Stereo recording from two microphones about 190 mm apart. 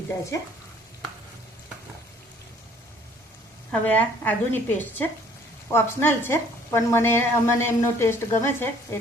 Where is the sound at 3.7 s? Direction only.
10° left (ahead or behind).